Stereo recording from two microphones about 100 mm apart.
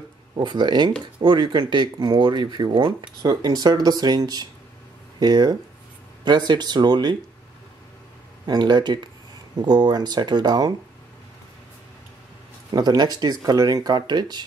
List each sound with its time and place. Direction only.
0.4 s speech: 50° right (ahead or behind)
8.5 s speech: 45° right (ahead or behind)
12.7 s speech: 45° right (ahead or behind)